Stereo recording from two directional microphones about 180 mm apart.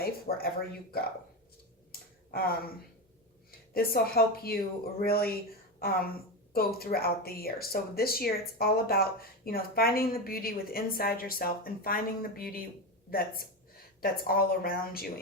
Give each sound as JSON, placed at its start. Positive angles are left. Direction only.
{"t": 0.0, "sound": "speech", "side_deg": 60}
{"t": 1.9, "sound": "finger snapping", "side_deg": 55}
{"t": 3.8, "sound": "speech", "side_deg": 55}
{"t": 6.5, "sound": "a woman's voice", "side_deg": 60}